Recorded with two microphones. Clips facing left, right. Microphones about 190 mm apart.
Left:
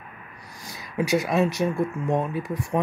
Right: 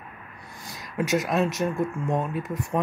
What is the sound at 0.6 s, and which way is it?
Speech, centre (ahead or behind).